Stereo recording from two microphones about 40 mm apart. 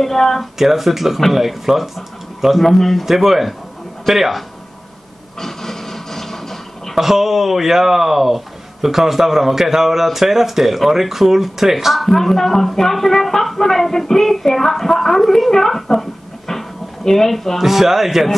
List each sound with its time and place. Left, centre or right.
0.0 s speech: centre
0.6 s speech: centre
5.4 s a sound: centre
7.0 s a man's voice: centre
12.1 s a woman's voice: centre
17.6 s a man's voice: centre